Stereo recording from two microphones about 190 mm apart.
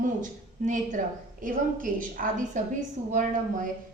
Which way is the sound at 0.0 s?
40° right (ahead or behind).